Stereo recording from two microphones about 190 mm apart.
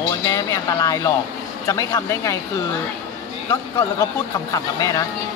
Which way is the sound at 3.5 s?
20° left (ahead or behind).